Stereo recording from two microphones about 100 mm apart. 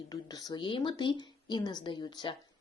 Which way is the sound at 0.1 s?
40° left (ahead or behind).